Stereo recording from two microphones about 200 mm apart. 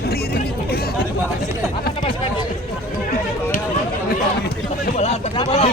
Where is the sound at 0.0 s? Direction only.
50° left (ahead or behind).